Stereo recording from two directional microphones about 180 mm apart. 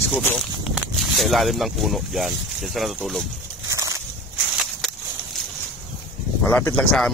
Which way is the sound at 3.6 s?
15° right (ahead or behind).